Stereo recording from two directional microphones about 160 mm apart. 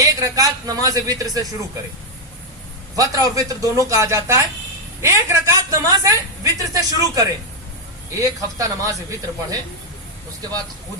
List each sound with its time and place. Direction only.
0.0 s a woman's voice: 20° right (ahead or behind)
2.9 s a woman's voice: 20° right (ahead or behind)